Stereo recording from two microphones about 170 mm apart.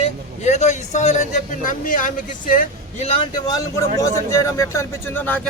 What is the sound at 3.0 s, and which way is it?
Speech, 30° left (ahead or behind).